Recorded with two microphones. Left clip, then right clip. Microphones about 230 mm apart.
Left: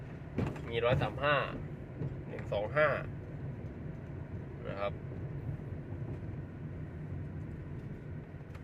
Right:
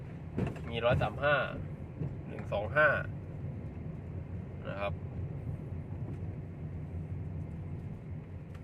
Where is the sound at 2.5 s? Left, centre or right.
Centre.